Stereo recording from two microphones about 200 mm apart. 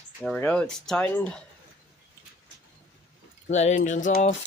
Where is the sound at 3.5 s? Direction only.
35° left (ahead or behind).